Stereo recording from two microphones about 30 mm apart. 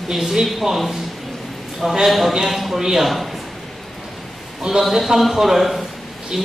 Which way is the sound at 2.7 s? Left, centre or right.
Centre.